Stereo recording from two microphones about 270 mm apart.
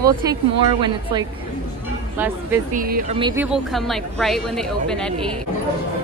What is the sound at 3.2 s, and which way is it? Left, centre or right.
Speech, centre.